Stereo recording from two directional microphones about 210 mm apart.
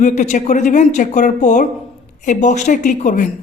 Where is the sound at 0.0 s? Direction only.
35° left (ahead or behind).